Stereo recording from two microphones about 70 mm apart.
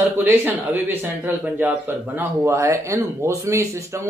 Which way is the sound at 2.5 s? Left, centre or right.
Right.